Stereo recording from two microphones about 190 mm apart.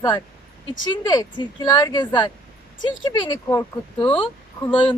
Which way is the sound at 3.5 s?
10° left (ahead or behind).